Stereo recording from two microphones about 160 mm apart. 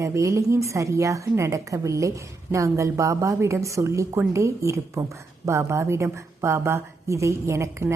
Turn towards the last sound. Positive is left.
turn(degrees=-20)  # may be behind; listen again after turning